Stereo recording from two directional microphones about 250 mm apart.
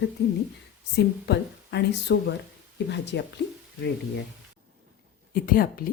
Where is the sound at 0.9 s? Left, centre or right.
Left.